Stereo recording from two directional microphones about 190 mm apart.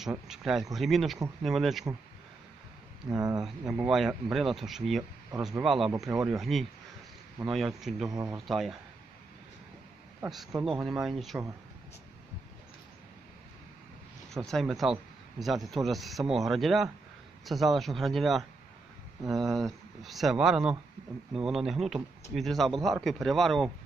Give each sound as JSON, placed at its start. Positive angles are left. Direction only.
{"t": 0.0, "sound": "speech", "side_deg": -5}
{"t": 3.1, "sound": "speech", "side_deg": -20}
{"t": 3.4, "sound": "speech", "side_deg": 0}
{"t": 10.2, "sound": "speech", "side_deg": 0}
{"t": 14.3, "sound": "speech", "side_deg": 0}